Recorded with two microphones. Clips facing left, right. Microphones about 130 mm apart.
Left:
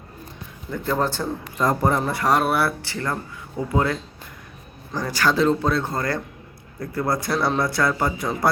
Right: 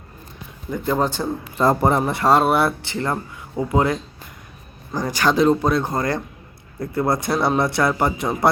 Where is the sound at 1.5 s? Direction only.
30° right (ahead or behind).